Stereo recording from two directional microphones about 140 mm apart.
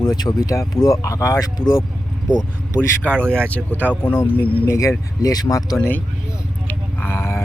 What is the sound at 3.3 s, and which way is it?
Speech, 15° right (ahead or behind).